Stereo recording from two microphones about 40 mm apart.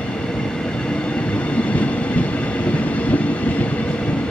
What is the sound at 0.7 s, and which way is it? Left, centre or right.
Train, left.